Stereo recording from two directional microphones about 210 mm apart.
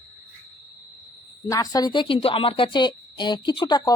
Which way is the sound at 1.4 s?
15° left (ahead or behind).